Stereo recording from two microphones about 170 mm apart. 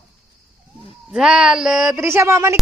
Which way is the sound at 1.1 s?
5° right (ahead or behind).